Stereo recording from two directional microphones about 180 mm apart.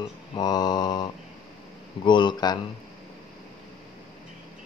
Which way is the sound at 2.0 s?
25° left (ahead or behind).